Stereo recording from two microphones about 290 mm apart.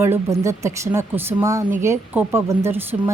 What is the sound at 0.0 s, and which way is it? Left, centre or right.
Speech, centre.